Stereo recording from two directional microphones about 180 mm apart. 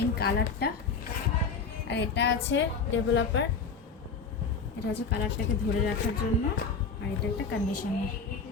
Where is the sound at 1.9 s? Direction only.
70° left (ahead or behind).